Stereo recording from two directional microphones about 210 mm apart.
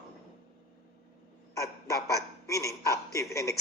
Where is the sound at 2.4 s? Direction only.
15° left (ahead or behind).